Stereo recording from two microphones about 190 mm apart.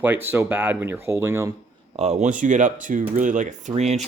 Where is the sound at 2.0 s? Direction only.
35° right (ahead or behind).